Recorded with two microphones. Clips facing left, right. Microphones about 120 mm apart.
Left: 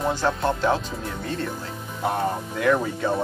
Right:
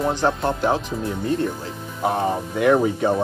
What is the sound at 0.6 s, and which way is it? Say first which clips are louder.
Speech: right 1 dB; 15° right (ahead or behind).